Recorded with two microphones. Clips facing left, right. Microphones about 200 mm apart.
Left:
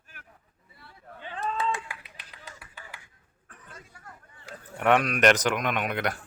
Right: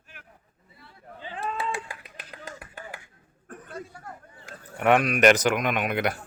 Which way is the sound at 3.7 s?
40° right (ahead or behind).